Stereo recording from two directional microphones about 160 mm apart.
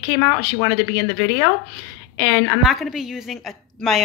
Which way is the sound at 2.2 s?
5° left (ahead or behind).